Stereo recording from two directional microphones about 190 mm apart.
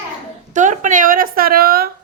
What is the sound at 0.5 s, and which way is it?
A woman's voice, 40° right (ahead or behind).